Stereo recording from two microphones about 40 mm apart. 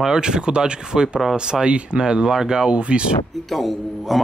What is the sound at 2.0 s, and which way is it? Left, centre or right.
Speech, centre.